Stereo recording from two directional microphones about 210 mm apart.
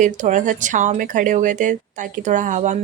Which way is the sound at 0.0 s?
35° right (ahead or behind).